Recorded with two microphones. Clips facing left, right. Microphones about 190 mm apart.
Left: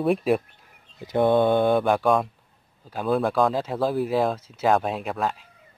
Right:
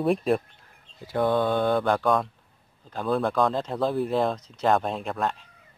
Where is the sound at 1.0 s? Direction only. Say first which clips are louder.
Left 4 dB; 20° left (ahead or behind).